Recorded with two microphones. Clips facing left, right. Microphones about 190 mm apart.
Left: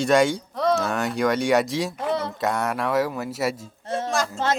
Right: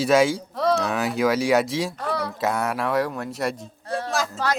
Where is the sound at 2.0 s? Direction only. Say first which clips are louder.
Left 2 dB; 20° left (ahead or behind).